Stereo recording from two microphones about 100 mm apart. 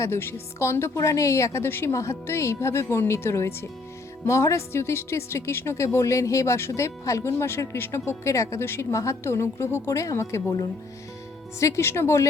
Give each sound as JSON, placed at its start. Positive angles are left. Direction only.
{"t": 0.0, "sound": "a woman's voice", "side_deg": 25}